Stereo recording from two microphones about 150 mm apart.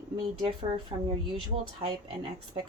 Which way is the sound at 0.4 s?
35° right (ahead or behind).